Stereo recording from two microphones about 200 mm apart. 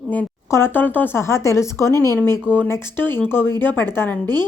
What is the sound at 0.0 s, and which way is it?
Speech, 5° left (ahead or behind).